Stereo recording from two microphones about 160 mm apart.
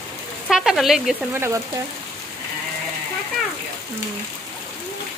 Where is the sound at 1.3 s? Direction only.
15° right (ahead or behind).